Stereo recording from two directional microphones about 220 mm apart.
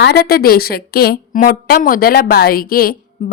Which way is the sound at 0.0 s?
45° left (ahead or behind).